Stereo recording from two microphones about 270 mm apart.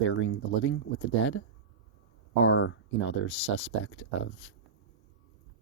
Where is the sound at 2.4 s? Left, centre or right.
Left.